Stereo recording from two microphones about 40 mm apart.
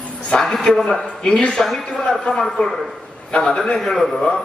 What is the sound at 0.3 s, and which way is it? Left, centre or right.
A man's voice, centre.